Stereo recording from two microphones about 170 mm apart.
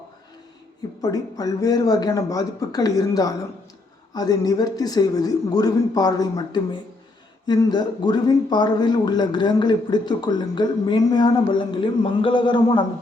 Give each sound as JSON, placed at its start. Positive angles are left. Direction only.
{"t": 1.0, "sound": "speech", "side_deg": 20}